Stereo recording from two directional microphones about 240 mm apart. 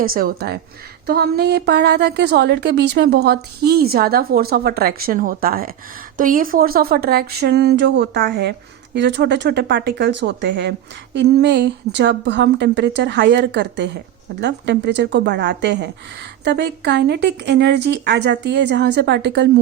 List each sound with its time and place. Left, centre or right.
0.0 s a woman's voice: right